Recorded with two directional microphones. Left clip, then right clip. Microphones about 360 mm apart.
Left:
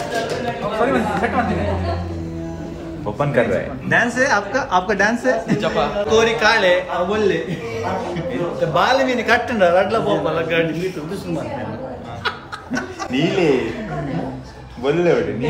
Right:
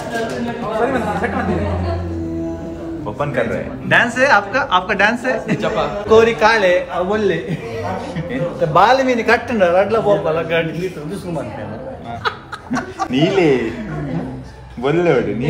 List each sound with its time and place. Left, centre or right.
3.4 s a man's voice: centre
8.5 s a man's voice: centre
12.7 s speech: centre
14.8 s speech: right